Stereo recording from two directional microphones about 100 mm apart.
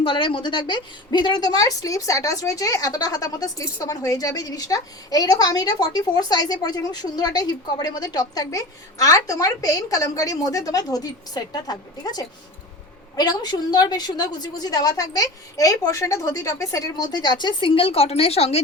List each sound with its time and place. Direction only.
0.0 s a woman's voice: 55° left (ahead or behind); by 18.6 s 90° left